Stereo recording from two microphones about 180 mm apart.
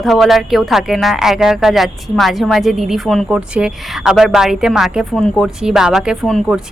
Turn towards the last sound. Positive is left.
turn(degrees=0)  # may be behind; listen again after turning